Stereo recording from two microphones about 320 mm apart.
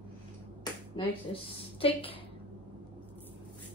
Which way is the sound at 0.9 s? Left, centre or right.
Centre.